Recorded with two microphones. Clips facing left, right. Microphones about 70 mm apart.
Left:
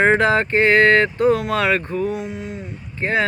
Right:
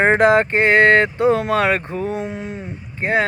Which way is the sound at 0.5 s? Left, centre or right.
Centre.